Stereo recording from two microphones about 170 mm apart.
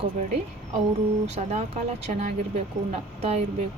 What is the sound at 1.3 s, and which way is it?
Speech, 40° right (ahead or behind).